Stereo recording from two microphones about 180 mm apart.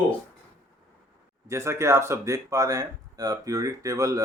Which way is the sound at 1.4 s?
15° right (ahead or behind).